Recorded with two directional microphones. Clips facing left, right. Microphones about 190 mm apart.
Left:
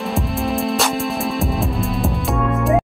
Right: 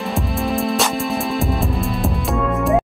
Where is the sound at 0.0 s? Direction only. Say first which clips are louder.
Even; centre (ahead or behind).